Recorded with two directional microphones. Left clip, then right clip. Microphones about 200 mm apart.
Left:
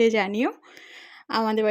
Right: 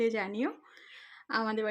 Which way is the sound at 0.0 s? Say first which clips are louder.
Left 10 dB; 40° left (ahead or behind).